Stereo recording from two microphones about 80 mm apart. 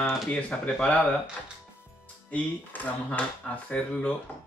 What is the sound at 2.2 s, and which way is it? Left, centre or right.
Speech, centre.